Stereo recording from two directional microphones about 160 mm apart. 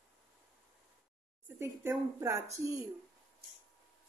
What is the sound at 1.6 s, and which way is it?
Speech, 15° right (ahead or behind).